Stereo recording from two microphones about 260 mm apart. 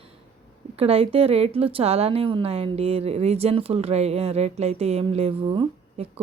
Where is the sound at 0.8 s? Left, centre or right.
Right.